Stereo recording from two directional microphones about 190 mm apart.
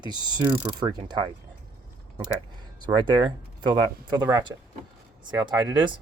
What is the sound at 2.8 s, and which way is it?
Speech, 25° right (ahead or behind).